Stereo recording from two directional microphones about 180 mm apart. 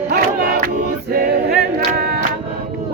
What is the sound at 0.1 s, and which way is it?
Choir, 65° right (ahead or behind).